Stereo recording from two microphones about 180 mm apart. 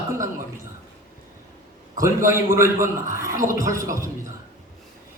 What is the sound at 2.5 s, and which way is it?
A man's voice, 15° right (ahead or behind).